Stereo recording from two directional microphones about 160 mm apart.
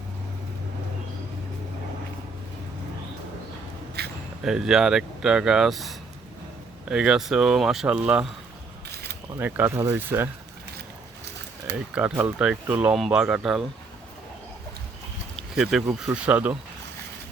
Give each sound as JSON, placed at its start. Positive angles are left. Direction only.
{"t": 4.0, "sound": "a sound", "side_deg": -90}
{"t": 4.4, "sound": "speech", "side_deg": -5}
{"t": 9.4, "sound": "speech", "side_deg": -15}
{"t": 11.9, "sound": "speech", "side_deg": -10}
{"t": 15.4, "sound": "speech", "side_deg": -5}